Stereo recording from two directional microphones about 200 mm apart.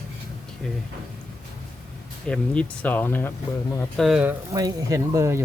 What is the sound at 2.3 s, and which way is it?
Speech, 5° left (ahead or behind).